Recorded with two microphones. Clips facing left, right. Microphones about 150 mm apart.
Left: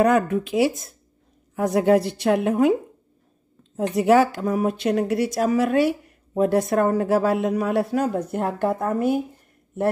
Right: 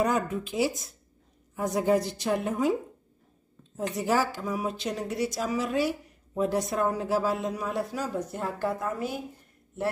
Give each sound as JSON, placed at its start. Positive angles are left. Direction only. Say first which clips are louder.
{"t": 0.0, "sound": "speech", "louder": "left 8 dB", "side_deg": 65}